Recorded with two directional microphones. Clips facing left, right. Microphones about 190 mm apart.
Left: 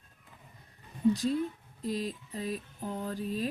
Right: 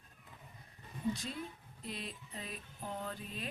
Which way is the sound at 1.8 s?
40° left (ahead or behind).